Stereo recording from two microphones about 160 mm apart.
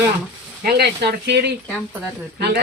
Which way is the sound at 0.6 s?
80° right.